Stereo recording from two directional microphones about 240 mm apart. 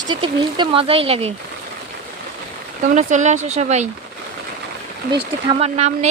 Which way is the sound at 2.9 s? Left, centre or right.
Right.